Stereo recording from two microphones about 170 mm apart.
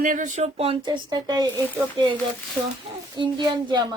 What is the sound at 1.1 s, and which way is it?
Speech, 25° right (ahead or behind).